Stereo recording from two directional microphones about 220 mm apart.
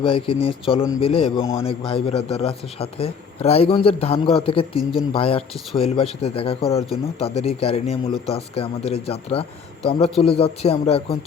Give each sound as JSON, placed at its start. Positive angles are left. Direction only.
{"t": 0.0, "sound": "speech", "side_deg": 25}